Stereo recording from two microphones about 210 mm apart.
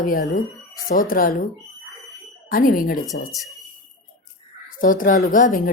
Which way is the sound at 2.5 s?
40° left (ahead or behind).